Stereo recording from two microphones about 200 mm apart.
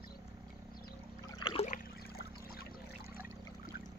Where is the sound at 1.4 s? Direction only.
30° left (ahead or behind).